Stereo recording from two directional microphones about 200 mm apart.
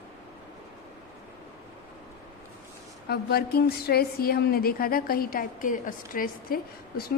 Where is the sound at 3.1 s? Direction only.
50° left (ahead or behind).